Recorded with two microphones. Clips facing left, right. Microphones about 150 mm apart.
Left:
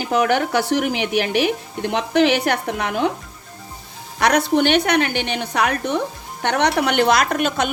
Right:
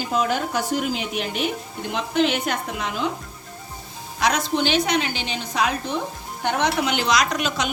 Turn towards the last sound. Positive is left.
turn(degrees=55)  # may be behind; listen again after turning